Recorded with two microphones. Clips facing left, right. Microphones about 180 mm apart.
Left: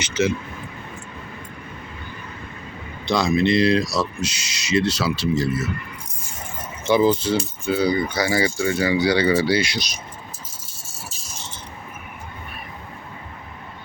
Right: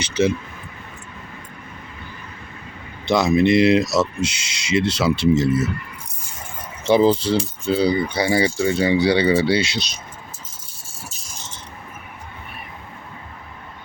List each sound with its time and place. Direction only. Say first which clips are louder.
0.0 s speech: right 2 dB; 30° right (ahead or behind)
3.1 s speech: right 3 dB; 20° right (ahead or behind)
6.8 s speech: right 2 dB; 30° right (ahead or behind)